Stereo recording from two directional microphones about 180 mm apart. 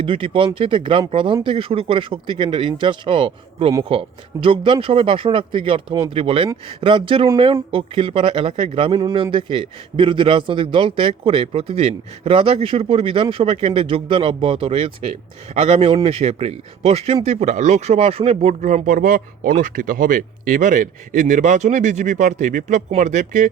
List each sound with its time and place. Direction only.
0.0 s a man's voice: 30° right (ahead or behind)